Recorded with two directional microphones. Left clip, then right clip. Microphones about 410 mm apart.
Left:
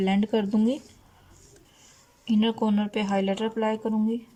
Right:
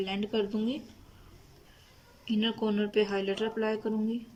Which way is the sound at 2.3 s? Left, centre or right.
Centre.